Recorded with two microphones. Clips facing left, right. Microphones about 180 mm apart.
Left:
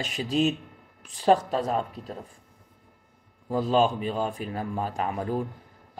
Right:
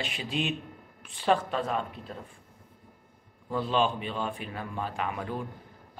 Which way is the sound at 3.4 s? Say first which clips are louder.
Left 4 dB; 40° left (ahead or behind).